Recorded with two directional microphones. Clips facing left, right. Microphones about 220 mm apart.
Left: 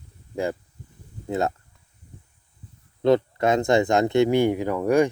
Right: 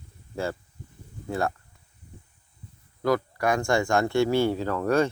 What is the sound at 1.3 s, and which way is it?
Speech, 20° left (ahead or behind).